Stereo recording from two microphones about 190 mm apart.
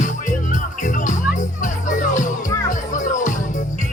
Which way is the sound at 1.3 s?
40° left (ahead or behind).